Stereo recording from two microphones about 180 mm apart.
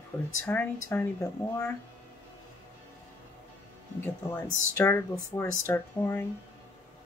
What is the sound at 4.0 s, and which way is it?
Music, 20° left (ahead or behind).